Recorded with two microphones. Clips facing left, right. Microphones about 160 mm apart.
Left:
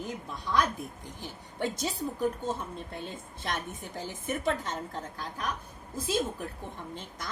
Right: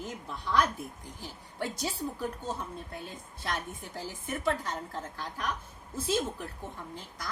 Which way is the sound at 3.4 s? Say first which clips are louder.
Left 1 dB; 20° left (ahead or behind).